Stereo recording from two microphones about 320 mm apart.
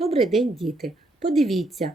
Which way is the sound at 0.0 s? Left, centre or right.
Centre.